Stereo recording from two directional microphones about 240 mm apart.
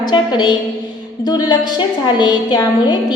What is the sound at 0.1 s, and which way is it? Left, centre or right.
A woman's voice, centre.